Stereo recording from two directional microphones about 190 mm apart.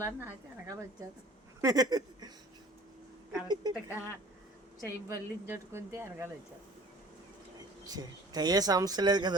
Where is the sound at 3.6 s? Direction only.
20° right (ahead or behind).